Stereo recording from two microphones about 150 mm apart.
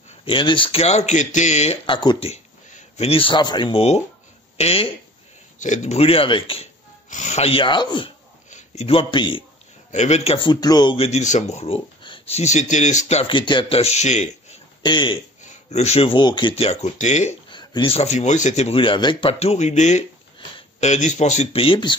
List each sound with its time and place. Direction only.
0.2 s speech: 35° left (ahead or behind)
1.9 s speech: 30° left (ahead or behind)
2.2 s speech: 45° left (ahead or behind)
7.1 s speech: 50° left (ahead or behind); by 8.1 s 30° left (ahead or behind)
8.5 s speech: 50° left (ahead or behind)
9.8 s speech: 50° left (ahead or behind); by 11.0 s 25° left (ahead or behind)
11.0 s speech: 45° left (ahead or behind)
13.3 s speech: 35° left (ahead or behind); by 14.6 s 50° left (ahead or behind)
14.8 s speech: 30° left (ahead or behind)
15.4 s speech: 45° left (ahead or behind)
17.5 s speech: 30° left (ahead or behind)
19.4 s speech: 50° left (ahead or behind)